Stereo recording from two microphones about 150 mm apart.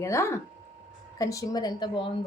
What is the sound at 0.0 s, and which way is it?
A woman's voice, 20° left (ahead or behind).